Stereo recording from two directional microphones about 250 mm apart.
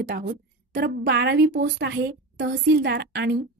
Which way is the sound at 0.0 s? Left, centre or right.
Right.